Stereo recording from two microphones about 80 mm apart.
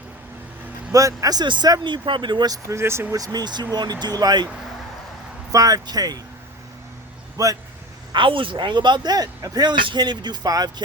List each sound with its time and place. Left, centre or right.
0.9 s speech: right
1.5 s speech: right
1.8 s speech: right
2.6 s speech: right
3.2 s speech: right
5.5 s speech: right
7.4 s speech: right
8.1 s speech: right
9.1 s speech: right